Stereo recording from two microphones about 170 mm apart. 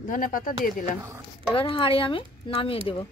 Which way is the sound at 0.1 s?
55° left (ahead or behind).